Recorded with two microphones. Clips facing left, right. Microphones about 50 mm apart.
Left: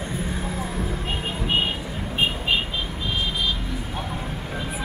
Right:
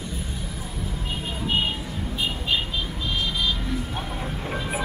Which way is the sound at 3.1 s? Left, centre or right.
Centre.